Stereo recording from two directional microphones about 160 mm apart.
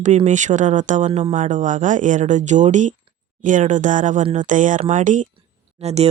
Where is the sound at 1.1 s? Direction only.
35° right (ahead or behind).